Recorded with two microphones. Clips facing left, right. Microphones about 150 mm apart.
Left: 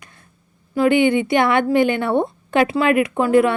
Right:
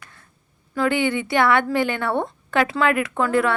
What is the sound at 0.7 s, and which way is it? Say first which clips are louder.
A woman's voice: left 6 dB; 15° left (ahead or behind).